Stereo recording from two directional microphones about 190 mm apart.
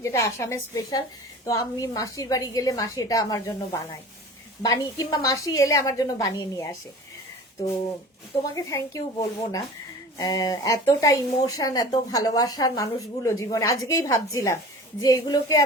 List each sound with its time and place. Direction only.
0.0 s a woman's voice: 15° left (ahead or behind)
8.5 s a woman's voice: 15° left (ahead or behind)